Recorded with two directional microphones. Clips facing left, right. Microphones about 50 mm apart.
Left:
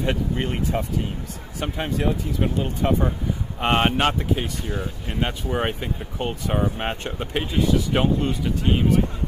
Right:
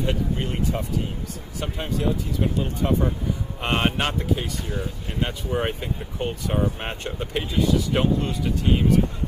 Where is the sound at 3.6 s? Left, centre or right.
Left.